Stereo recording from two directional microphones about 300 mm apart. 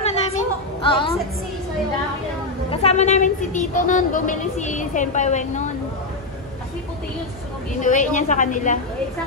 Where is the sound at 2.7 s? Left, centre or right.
Left.